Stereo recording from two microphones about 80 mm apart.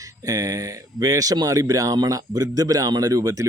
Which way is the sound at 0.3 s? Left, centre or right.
Right.